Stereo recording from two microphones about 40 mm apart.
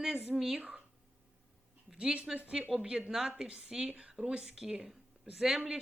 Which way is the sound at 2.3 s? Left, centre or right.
Right.